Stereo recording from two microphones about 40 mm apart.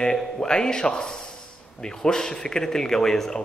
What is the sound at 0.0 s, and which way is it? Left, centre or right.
A man's voice, centre.